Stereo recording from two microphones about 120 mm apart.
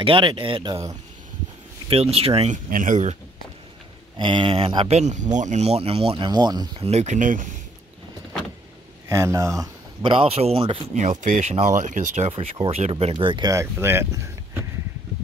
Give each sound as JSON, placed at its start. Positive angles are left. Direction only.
{"t": 0.0, "sound": "speech", "side_deg": -45}
{"t": 1.9, "sound": "speech", "side_deg": -55}
{"t": 2.5, "sound": "speech", "side_deg": -90}
{"t": 4.2, "sound": "speech", "side_deg": -45}
{"t": 4.9, "sound": "speech", "side_deg": -80}
{"t": 6.8, "sound": "speech", "side_deg": -65}
{"t": 9.1, "sound": "speech", "side_deg": -25}
{"t": 10.0, "sound": "speech", "side_deg": -55}
{"t": 11.0, "sound": "speech", "side_deg": -90}
{"t": 12.3, "sound": "speech", "side_deg": -55}
{"t": 13.0, "sound": "speech", "side_deg": -45}
{"t": 13.5, "sound": "speech", "side_deg": -20}